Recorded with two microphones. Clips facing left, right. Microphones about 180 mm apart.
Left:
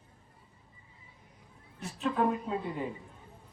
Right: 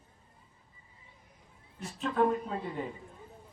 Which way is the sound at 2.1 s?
Centre (ahead or behind).